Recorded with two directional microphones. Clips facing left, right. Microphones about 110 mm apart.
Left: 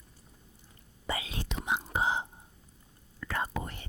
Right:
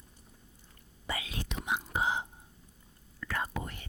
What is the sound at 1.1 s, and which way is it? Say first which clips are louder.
Whispering: left 2 dB; 30° left (ahead or behind).